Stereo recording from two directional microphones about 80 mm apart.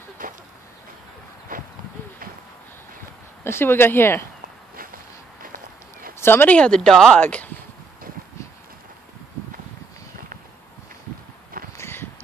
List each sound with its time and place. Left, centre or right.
3.4 s speech: left
6.1 s speech: left; by 7.2 s centre
7.2 s speech: centre
11.7 s a sound: left